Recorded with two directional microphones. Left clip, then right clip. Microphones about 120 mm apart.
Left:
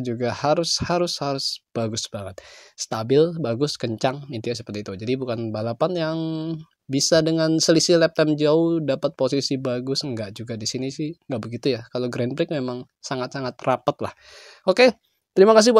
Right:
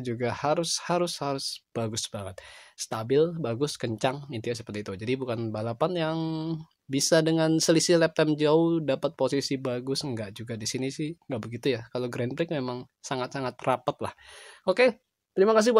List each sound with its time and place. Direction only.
0.0 s speech: 25° left (ahead or behind)
2.8 s speech: 35° left (ahead or behind)
14.6 s speech: 45° left (ahead or behind)